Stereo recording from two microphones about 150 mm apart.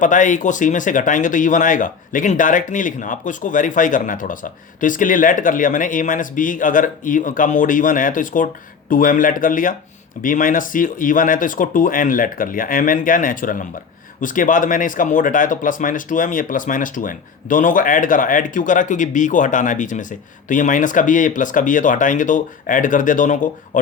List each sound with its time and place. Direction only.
0.0 s speech: 60° left (ahead or behind)